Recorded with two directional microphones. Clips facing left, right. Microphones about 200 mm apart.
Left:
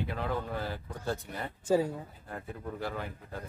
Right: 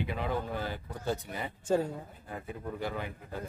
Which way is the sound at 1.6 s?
10° left (ahead or behind).